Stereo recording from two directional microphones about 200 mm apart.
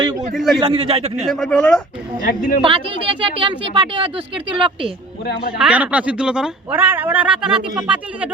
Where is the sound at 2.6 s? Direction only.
25° right (ahead or behind).